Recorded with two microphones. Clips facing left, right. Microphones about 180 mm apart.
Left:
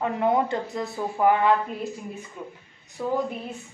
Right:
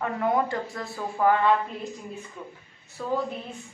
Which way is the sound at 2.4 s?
10° left (ahead or behind).